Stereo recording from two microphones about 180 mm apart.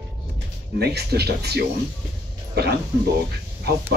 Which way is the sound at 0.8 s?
65° right (ahead or behind).